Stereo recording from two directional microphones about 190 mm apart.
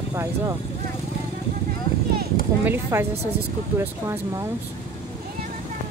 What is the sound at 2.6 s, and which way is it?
Speech, 10° right (ahead or behind).